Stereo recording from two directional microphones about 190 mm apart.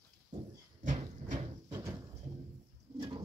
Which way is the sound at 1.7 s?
15° right (ahead or behind).